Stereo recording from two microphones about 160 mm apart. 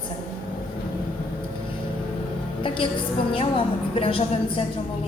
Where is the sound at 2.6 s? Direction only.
35° left (ahead or behind).